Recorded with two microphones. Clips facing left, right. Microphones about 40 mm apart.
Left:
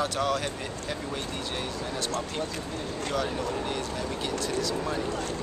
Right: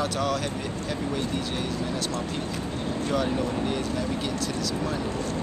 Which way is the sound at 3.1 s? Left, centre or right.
Centre.